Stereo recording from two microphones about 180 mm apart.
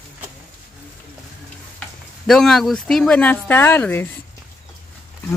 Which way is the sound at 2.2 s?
Centre (ahead or behind).